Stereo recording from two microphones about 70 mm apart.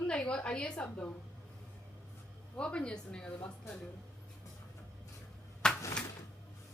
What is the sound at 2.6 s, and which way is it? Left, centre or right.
A woman's voice, centre.